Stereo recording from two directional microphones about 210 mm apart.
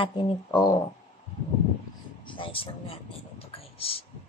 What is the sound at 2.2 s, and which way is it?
Speech, 25° left (ahead or behind).